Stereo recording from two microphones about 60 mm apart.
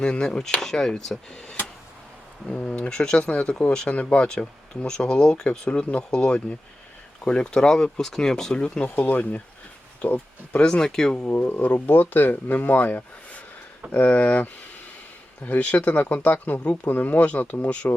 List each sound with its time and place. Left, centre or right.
0.0 s speech: centre
2.5 s speech: centre
9.0 s speech: left; by 11.1 s centre
11.3 s speech: left